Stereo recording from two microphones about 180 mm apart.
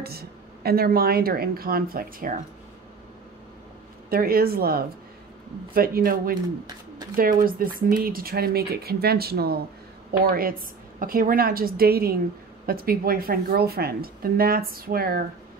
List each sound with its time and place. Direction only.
0.0 s speech: 60° right (ahead or behind)
4.1 s speech: 55° right (ahead or behind)